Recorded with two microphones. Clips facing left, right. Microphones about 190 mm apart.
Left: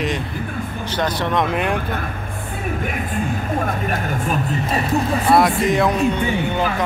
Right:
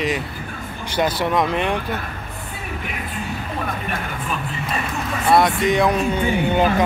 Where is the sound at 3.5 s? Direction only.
40° left (ahead or behind).